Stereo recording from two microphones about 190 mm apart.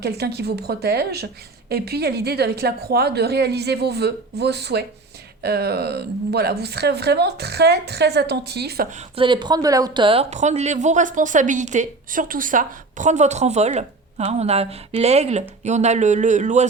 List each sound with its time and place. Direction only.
0.0 s a woman's voice: 60° right (ahead or behind)
8.9 s speech: 35° right (ahead or behind)